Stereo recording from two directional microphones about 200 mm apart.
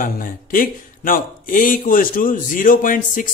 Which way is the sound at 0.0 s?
45° left (ahead or behind).